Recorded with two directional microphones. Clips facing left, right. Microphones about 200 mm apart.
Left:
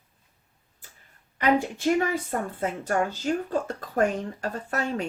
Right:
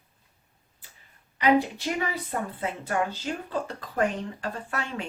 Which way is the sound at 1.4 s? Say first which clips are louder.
Right 1 dB; 50° left (ahead or behind).